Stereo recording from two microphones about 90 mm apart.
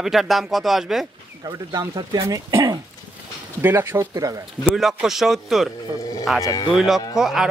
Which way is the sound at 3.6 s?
25° right (ahead or behind).